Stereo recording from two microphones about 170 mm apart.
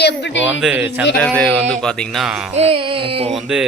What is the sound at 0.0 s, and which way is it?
Speech, 90° left.